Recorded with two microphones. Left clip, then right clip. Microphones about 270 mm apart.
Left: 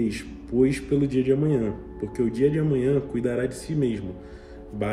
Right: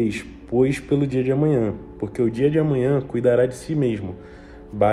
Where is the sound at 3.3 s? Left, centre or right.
Right.